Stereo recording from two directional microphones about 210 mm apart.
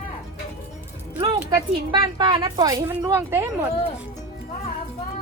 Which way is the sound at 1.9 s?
20° right (ahead or behind).